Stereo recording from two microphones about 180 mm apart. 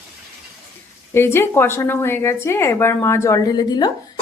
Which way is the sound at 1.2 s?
15° left (ahead or behind).